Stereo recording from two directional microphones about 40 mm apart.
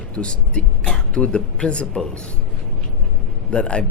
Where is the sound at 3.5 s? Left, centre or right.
Left.